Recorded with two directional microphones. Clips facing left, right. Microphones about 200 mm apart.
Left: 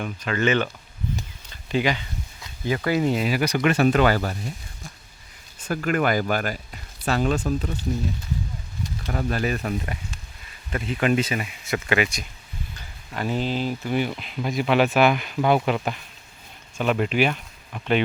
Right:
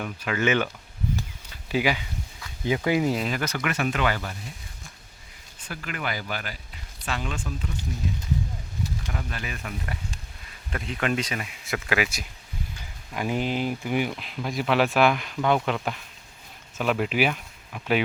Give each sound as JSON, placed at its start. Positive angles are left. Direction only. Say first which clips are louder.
{"t": 0.0, "sound": "speech", "louder": "left 2 dB", "side_deg": -10}
{"t": 1.7, "sound": "speech", "louder": "left 1 dB", "side_deg": -10}
{"t": 3.0, "sound": "speech", "louder": "left 3 dB", "side_deg": 0}
{"t": 3.6, "sound": "speech", "louder": "left 9 dB", "side_deg": 30}
{"t": 9.0, "sound": "speech", "louder": "left 9 dB", "side_deg": 40}
{"t": 10.7, "sound": "speech", "louder": "left 5 dB", "side_deg": 5}
{"t": 14.1, "sound": "speech", "louder": "left 3 dB", "side_deg": 0}